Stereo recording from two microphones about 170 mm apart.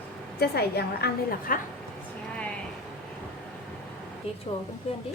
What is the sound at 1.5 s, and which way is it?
Speech, 50° left (ahead or behind).